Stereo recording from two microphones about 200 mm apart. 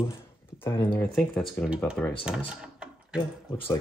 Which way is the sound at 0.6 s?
10° left (ahead or behind).